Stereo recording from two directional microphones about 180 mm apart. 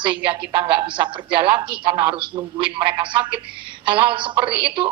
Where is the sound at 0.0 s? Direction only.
25° right (ahead or behind).